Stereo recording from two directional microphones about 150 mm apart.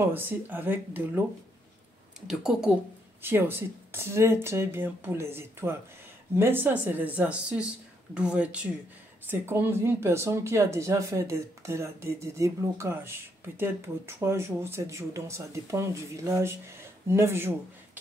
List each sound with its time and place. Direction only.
0.0 s speech: 15° right (ahead or behind)
2.2 s speech: 5° right (ahead or behind)